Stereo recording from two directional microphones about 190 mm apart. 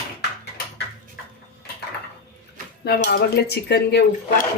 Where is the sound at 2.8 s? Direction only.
55° left (ahead or behind).